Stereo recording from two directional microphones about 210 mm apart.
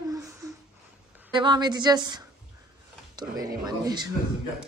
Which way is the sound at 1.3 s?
20° right (ahead or behind).